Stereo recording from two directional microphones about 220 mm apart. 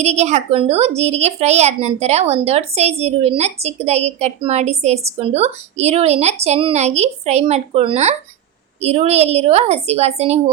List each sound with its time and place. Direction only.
0.0 s a woman's voice: 30° right (ahead or behind)